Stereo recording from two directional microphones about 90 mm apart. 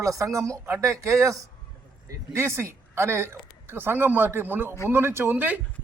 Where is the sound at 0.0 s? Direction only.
35° right (ahead or behind).